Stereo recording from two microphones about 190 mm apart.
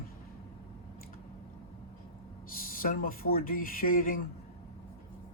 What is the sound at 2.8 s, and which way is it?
Speech, 50° left (ahead or behind).